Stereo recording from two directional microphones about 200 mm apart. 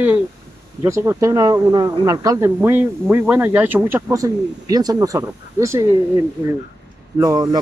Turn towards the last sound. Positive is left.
turn(degrees=-20)  # may be behind; listen again after turning